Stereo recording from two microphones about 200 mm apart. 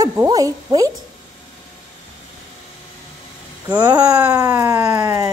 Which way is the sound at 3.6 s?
20° right (ahead or behind).